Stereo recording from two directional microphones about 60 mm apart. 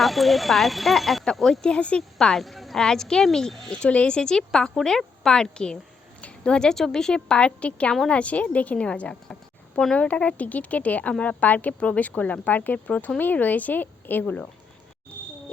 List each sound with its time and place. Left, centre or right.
0.0 s a woman's voice: centre
1.7 s speech: centre
2.1 s a woman's voice: centre; by 14.4 s left